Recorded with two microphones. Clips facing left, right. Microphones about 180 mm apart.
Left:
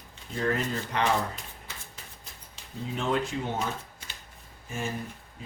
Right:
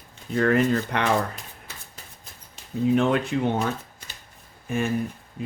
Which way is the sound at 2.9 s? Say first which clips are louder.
Right 6 dB; 65° right (ahead or behind).